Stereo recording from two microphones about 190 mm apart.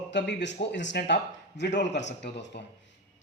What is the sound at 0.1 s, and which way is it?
Speech, 65° left (ahead or behind).